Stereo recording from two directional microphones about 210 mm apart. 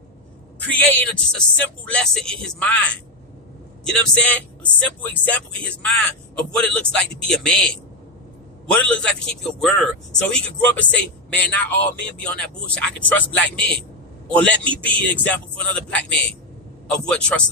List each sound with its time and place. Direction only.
0.7 s speech: 5° left (ahead or behind)